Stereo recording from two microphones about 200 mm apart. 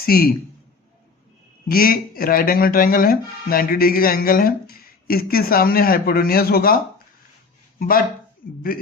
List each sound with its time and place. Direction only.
0.0 s speech: 50° left (ahead or behind)
1.6 s speech: 45° left (ahead or behind)
7.8 s speech: 45° left (ahead or behind)